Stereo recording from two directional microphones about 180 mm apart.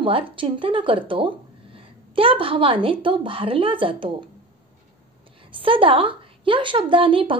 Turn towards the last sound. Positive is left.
turn(degrees=-30)  # may be behind; listen again after turning